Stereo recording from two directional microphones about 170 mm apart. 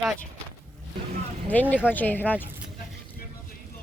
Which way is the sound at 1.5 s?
10° left (ahead or behind).